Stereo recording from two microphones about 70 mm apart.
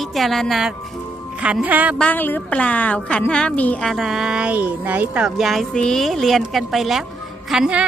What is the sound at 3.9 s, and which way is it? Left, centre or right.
Speech, centre.